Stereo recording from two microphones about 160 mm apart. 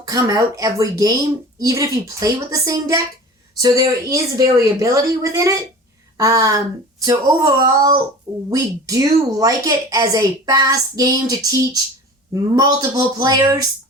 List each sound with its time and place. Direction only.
0.0 s a woman's voice: 20° right (ahead or behind)